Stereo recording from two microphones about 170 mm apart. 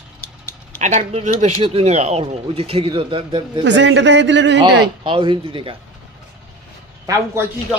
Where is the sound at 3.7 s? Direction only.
90° right.